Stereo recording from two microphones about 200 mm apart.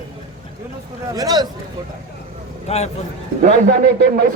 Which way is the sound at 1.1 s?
20° right (ahead or behind).